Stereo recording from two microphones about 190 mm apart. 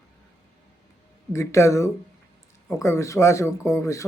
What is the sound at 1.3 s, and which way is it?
A man's voice, 15° left (ahead or behind).